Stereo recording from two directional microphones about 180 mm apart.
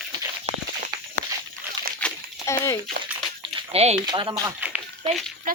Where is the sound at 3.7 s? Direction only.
35° right (ahead or behind).